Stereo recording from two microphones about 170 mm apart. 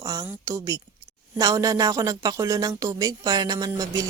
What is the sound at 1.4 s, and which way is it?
Speech, 20° right (ahead or behind).